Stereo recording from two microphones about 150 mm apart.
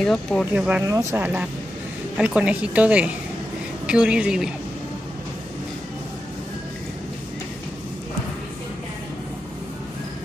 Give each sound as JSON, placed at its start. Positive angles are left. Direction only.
{"t": 0.0, "sound": "a woman's voice", "side_deg": 5}
{"t": 0.5, "sound": "a woman's voice", "side_deg": -10}